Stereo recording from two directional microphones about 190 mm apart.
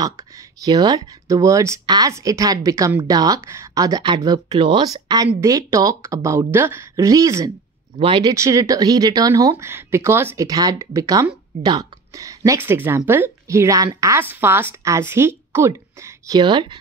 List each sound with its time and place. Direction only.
0.7 s speech: 20° right (ahead or behind)